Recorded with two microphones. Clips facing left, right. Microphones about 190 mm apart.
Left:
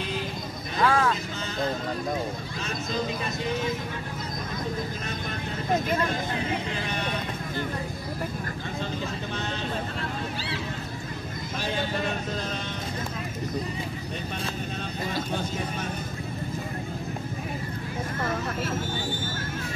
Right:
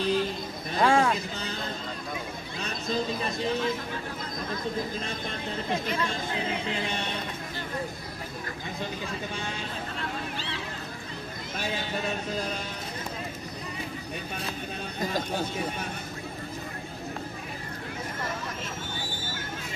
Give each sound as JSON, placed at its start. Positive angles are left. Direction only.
{"t": 0.7, "sound": "vehicle", "side_deg": -25}
{"t": 5.9, "sound": "speech", "side_deg": 50}